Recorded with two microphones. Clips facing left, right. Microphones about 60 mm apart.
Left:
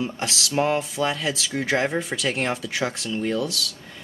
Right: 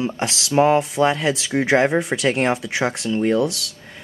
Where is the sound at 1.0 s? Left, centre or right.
Right.